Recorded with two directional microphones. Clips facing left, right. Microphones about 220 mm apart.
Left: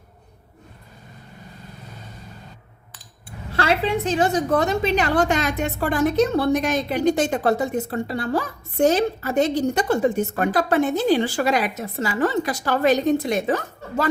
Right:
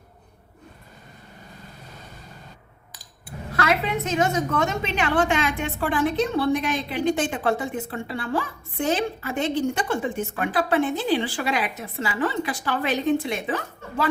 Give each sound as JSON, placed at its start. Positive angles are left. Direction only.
{"t": 3.5, "sound": "a woman's voice", "side_deg": 30}